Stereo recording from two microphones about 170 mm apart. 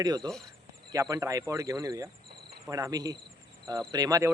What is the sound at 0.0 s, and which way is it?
Speech, 25° right (ahead or behind).